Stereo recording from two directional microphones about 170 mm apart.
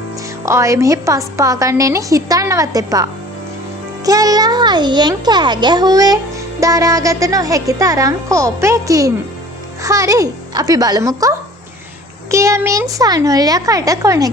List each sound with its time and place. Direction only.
0.5 s a woman's voice: 15° right (ahead or behind)